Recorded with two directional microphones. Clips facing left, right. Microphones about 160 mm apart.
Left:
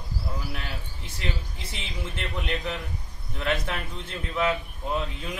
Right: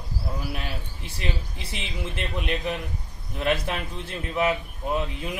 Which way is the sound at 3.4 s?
15° right (ahead or behind).